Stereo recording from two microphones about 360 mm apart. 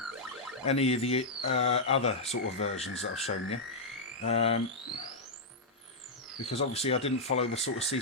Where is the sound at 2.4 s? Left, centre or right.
Left.